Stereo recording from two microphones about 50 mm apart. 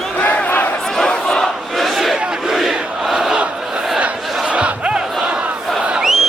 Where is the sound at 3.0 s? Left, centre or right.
Centre.